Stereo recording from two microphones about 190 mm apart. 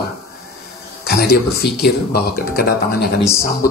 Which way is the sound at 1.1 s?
55° left (ahead or behind).